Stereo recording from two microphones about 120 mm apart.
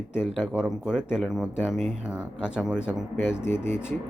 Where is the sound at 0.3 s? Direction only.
5° right (ahead or behind).